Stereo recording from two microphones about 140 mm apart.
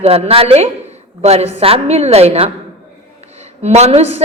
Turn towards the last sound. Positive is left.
turn(degrees=-50)  # may be behind; listen again after turning